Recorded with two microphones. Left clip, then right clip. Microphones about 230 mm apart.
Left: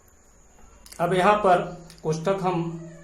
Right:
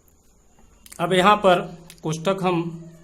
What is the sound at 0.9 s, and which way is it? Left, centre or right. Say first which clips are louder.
Speech: right 3 dB; right.